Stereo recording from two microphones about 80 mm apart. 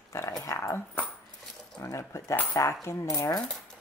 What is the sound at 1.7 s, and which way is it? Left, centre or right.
Speech, left.